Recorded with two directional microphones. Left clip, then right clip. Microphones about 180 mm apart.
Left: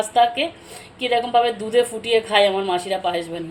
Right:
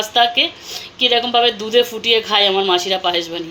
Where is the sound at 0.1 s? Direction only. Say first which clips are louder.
Right 4 dB; 10° right (ahead or behind).